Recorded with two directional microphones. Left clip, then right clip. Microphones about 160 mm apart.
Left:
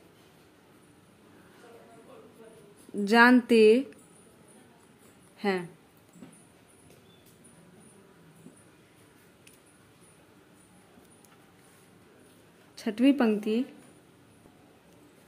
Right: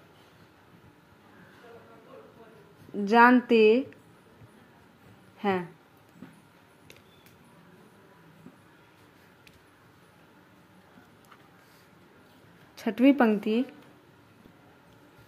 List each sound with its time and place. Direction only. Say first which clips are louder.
3.1 s a woman's voice: right 1 dB; 25° left (ahead or behind)
5.4 s speech: right 1 dB; 15° left (ahead or behind)
12.7 s a woman's voice: right 3 dB; 5° left (ahead or behind)